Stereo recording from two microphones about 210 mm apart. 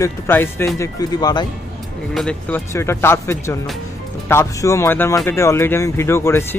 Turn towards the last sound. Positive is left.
turn(degrees=10)  # may be behind; listen again after turning